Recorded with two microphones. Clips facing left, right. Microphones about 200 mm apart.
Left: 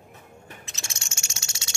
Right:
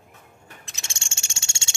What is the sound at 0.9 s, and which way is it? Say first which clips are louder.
Cricket: left 2 dB; 30° right (ahead or behind).